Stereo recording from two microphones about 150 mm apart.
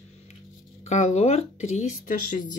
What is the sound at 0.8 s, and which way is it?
Speech, 50° left (ahead or behind).